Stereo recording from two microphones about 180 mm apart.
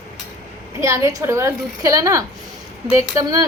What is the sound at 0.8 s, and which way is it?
A woman's voice, 15° right (ahead or behind).